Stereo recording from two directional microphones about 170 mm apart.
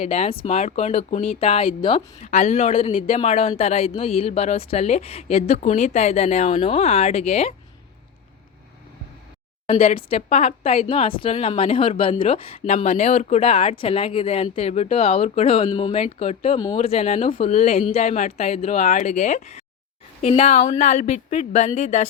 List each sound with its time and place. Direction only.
0.0 s speech: 40° left (ahead or behind)
9.6 s speech: 35° left (ahead or behind)